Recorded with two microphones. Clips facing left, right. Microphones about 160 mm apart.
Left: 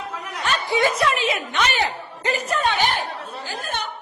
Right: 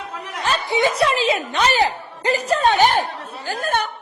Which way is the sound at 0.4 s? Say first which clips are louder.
Right 2 dB; 25° right (ahead or behind).